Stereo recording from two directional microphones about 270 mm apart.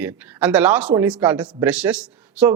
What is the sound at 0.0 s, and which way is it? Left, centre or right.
A man's voice, centre.